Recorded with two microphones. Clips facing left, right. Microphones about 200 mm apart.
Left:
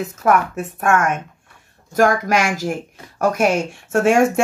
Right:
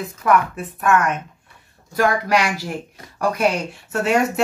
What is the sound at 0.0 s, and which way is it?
Speech, 45° left (ahead or behind).